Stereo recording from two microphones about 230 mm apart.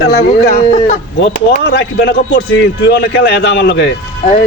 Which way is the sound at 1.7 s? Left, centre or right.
Left.